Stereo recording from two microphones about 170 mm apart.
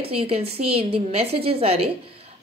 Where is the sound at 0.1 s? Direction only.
35° right (ahead or behind).